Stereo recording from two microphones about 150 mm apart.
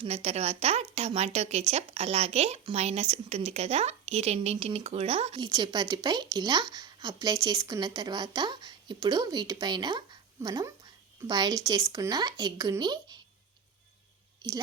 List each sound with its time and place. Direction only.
0.0 s speech: 45° right (ahead or behind)
5.4 s a woman's voice: 30° right (ahead or behind)